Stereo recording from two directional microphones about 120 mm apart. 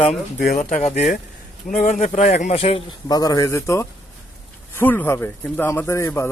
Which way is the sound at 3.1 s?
30° left (ahead or behind).